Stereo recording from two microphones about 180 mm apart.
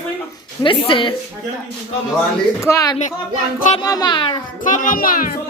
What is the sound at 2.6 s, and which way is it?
A child's voice, 15° left (ahead or behind).